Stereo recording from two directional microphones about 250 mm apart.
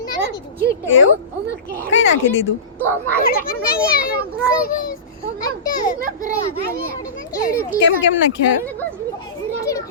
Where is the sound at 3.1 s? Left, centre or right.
Left.